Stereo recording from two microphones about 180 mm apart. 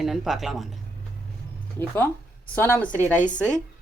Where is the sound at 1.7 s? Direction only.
10° left (ahead or behind).